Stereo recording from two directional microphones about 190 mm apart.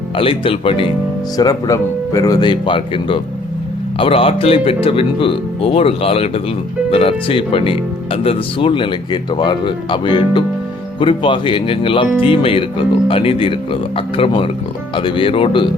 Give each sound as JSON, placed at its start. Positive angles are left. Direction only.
{"t": 0.2, "sound": "speech", "side_deg": 30}